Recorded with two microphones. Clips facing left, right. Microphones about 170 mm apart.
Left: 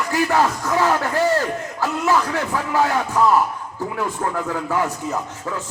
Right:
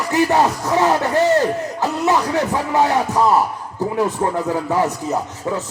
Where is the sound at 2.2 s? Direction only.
35° right (ahead or behind).